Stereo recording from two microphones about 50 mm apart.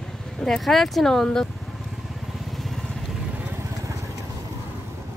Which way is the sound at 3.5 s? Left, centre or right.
Right.